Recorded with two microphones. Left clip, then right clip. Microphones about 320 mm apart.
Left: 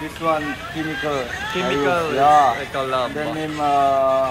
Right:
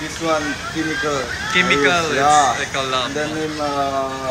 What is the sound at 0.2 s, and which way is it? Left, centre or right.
Speech, left.